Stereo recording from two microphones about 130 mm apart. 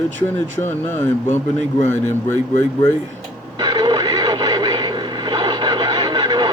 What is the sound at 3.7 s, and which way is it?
Radio, 35° right (ahead or behind).